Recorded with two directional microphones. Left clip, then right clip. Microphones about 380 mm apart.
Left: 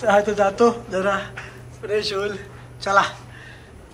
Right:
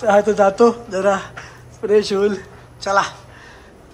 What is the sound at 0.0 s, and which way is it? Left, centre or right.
A man's voice, centre.